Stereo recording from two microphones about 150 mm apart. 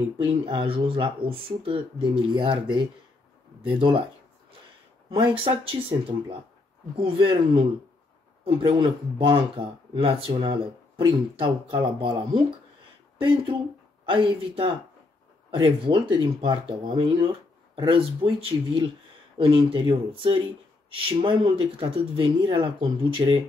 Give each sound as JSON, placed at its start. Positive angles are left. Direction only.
{"t": 0.2, "sound": "speech", "side_deg": -35}
{"t": 5.1, "sound": "speech", "side_deg": -35}
{"t": 14.0, "sound": "speech", "side_deg": -35}